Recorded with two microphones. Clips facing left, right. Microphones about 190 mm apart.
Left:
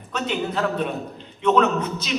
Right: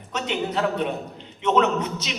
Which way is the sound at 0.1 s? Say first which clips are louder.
Left 1 dB; 20° right (ahead or behind).